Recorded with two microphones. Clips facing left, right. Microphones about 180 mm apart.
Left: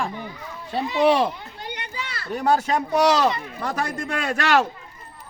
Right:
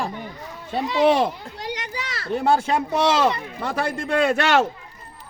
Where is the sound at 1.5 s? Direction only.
90° right.